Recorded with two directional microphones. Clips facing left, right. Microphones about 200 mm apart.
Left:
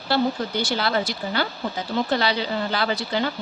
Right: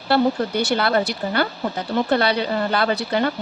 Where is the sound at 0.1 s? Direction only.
60° right (ahead or behind).